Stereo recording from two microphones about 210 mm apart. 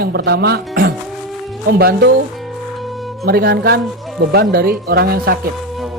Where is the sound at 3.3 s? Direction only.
50° right (ahead or behind).